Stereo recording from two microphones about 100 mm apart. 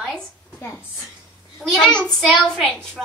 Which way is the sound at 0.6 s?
30° left (ahead or behind).